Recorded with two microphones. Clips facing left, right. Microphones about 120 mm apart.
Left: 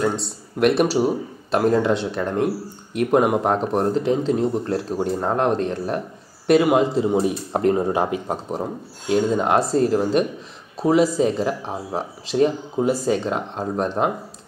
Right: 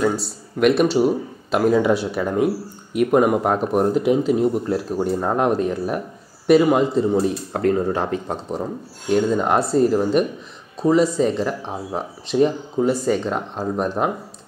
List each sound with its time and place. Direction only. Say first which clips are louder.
0.0 s a man's voice: right 2 dB; 5° right (ahead or behind)
7.1 s a man's voice: right 1 dB; 15° left (ahead or behind); by 14.1 s centre (ahead or behind)